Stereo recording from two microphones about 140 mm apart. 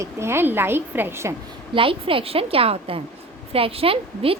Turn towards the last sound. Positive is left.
turn(degrees=-40)  # may be behind; listen again after turning